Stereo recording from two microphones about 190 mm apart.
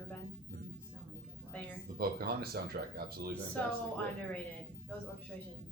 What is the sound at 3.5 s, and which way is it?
Speech, 10° left (ahead or behind).